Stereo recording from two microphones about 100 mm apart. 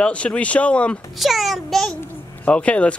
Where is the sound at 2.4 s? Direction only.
15° left (ahead or behind).